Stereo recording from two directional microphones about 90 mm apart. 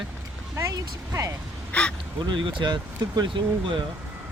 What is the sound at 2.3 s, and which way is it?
Speech, 65° right (ahead or behind).